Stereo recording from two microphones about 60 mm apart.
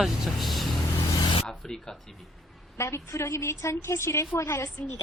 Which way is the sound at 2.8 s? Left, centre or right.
Left.